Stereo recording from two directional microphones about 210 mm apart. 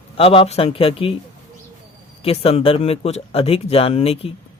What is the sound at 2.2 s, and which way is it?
Speech, 25° left (ahead or behind).